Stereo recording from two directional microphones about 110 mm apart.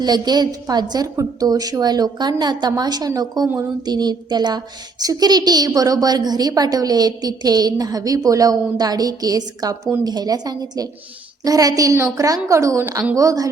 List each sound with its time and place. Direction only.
0.0 s a woman's voice: 40° right (ahead or behind)